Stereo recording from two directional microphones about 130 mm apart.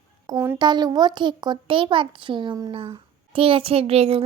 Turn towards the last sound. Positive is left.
turn(degrees=-50)  # may be behind; listen again after turning